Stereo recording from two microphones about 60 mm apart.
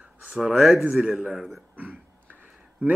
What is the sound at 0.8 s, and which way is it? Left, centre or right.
Speech, right.